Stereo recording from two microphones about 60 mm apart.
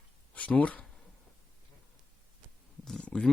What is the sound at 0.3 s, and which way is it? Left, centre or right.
Speech, left.